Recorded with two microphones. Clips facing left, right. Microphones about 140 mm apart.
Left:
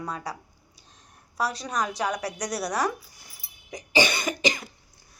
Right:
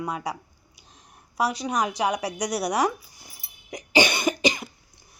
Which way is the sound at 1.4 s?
15° right (ahead or behind).